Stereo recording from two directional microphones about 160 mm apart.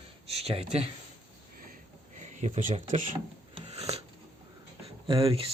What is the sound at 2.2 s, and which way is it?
Speech, 45° right (ahead or behind).